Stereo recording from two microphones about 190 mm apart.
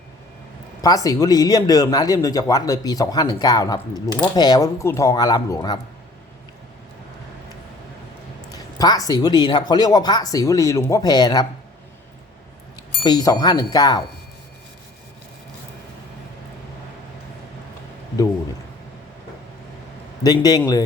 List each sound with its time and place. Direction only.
0.8 s a man's voice: 20° left (ahead or behind)
8.8 s a man's voice: 20° left (ahead or behind)
13.1 s a man's voice: 20° left (ahead or behind)
20.2 s a man's voice: 20° left (ahead or behind)